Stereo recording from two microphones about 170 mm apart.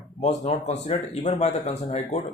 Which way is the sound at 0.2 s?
45° left (ahead or behind).